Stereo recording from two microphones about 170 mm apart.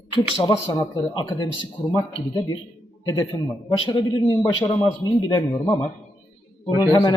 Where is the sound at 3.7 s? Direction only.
25° left (ahead or behind).